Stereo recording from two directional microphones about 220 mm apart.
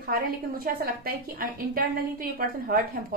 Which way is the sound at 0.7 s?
40° right (ahead or behind).